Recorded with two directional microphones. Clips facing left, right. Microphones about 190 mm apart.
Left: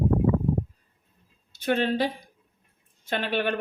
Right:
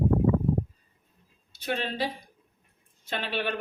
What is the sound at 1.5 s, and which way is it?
A woman's voice, 50° left (ahead or behind).